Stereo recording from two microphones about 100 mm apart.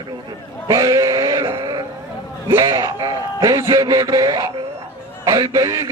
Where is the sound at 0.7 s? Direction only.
35° right (ahead or behind).